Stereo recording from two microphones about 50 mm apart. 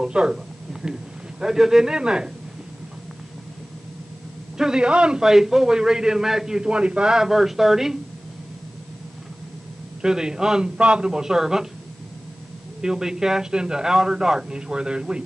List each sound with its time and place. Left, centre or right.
0.0 s a man's voice: centre
1.4 s a man's voice: centre
4.6 s a man's voice: centre
5.2 s a man's voice: centre
10.0 s a man's voice: centre
12.8 s a man's voice: centre